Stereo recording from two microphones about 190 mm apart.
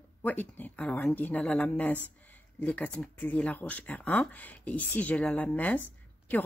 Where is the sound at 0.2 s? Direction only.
10° left (ahead or behind).